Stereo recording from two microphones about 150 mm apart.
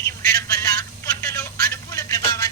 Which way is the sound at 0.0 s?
20° left (ahead or behind).